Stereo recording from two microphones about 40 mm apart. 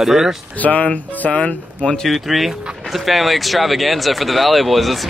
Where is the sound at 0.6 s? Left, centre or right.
Left.